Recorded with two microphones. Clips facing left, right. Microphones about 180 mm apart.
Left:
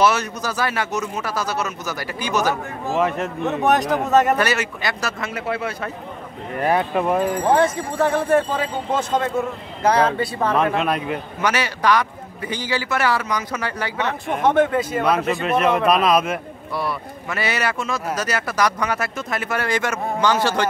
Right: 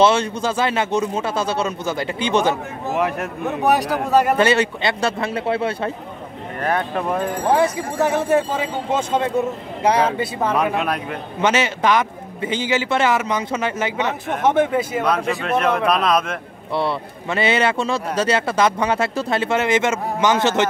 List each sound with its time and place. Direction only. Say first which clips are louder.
0.0 s speech: right 3 dB; 25° right (ahead or behind)
2.9 s speech: left 1 dB; 5° right (ahead or behind)
4.4 s speech: right 5 dB; 25° right (ahead or behind)
6.6 s speech: left 2 dB; 5° left (ahead or behind)
8.3 s speech: even; 10° right (ahead or behind)
11.4 s speech: right 2 dB; 25° right (ahead or behind)
15.0 s speech: left 1 dB; 5° left (ahead or behind)
16.7 s speech: right 4 dB; 25° right (ahead or behind)